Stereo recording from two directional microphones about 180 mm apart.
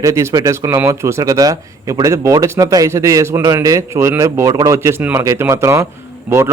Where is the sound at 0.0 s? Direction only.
15° right (ahead or behind).